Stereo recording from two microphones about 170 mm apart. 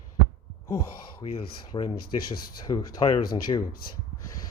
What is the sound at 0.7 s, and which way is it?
Speech, 25° left (ahead or behind).